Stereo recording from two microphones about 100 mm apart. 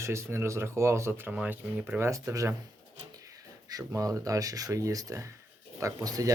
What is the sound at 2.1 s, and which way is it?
Speech, 30° right (ahead or behind).